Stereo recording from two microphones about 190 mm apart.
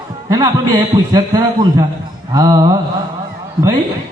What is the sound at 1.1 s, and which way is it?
A man's voice, 20° right (ahead or behind).